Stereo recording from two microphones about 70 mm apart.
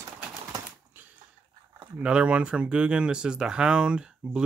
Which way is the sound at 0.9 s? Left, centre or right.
Right.